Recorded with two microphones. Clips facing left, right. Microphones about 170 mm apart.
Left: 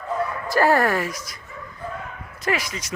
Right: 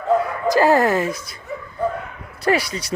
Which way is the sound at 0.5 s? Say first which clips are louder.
Right 3 dB; 20° right (ahead or behind).